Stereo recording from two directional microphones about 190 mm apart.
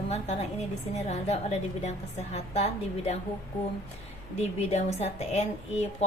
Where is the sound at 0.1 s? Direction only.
35° left (ahead or behind).